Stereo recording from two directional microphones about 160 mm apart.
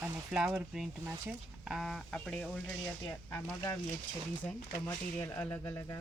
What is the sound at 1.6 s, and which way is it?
Speech, centre (ahead or behind).